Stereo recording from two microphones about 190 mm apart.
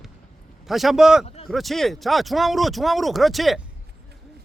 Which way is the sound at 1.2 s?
35° left (ahead or behind).